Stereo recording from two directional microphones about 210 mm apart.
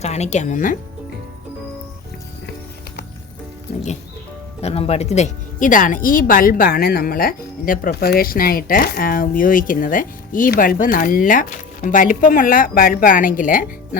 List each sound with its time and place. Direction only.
0.0 s speech: 30° left (ahead or behind)
4.6 s speech: 30° left (ahead or behind)